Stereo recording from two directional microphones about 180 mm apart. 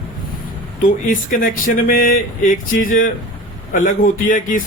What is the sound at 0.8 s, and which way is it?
Speech, 50° left (ahead or behind).